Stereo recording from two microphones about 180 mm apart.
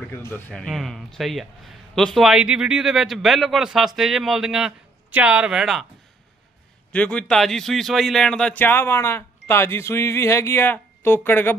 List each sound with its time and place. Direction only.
0.1 s speech: 10° left (ahead or behind)
6.9 s speech: 5° left (ahead or behind)